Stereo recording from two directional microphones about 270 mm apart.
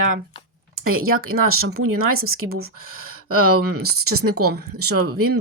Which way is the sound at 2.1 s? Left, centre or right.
Right.